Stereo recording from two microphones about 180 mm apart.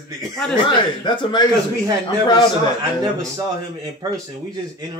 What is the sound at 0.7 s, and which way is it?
Speech, 25° left (ahead or behind).